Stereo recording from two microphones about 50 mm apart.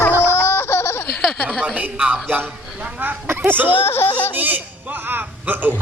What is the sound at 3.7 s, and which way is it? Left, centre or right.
Speech, left.